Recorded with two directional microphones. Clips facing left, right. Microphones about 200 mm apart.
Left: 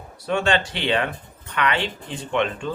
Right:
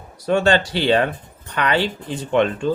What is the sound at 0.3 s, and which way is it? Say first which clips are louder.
Speech: right 5 dB; 40° right (ahead or behind).